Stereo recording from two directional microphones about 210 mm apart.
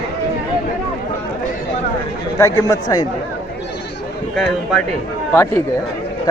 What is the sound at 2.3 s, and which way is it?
Speech, 15° left (ahead or behind).